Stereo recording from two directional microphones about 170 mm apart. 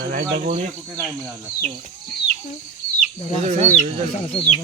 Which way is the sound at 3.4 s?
45° right (ahead or behind).